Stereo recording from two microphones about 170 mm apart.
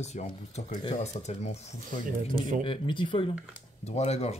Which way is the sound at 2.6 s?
30° left (ahead or behind).